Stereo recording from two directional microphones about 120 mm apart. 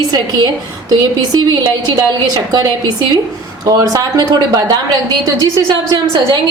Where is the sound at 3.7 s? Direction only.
30° right (ahead or behind).